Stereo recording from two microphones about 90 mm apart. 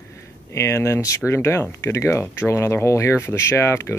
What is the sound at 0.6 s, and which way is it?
Speech, 30° left (ahead or behind).